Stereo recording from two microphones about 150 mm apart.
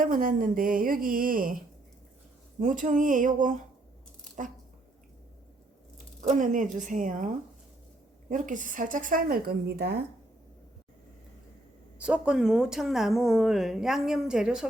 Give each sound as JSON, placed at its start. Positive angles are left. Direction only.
{"t": 0.0, "sound": "a woman's voice", "side_deg": -65}
{"t": 2.6, "sound": "speech", "side_deg": -60}
{"t": 6.2, "sound": "speech", "side_deg": -60}
{"t": 8.3, "sound": "speech", "side_deg": -60}
{"t": 11.9, "sound": "speech", "side_deg": -10}